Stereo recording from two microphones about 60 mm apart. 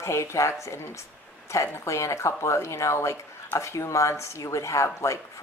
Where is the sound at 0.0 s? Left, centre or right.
Left.